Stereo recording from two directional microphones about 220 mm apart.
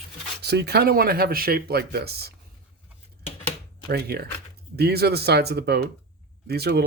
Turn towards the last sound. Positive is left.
turn(degrees=-45)  # may be behind; listen again after turning